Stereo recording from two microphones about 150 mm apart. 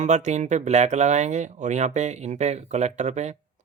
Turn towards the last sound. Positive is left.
turn(degrees=-50)  # may be behind; listen again after turning